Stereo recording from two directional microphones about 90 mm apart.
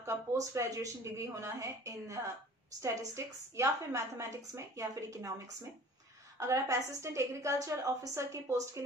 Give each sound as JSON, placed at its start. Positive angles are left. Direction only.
{"t": 0.0, "sound": "a woman's voice", "side_deg": -35}